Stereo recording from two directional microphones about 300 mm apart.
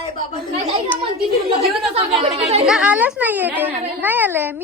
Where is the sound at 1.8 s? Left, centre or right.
Centre.